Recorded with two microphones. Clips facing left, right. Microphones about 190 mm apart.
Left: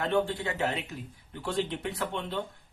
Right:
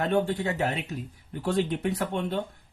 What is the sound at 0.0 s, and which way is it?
Speech, 45° right (ahead or behind).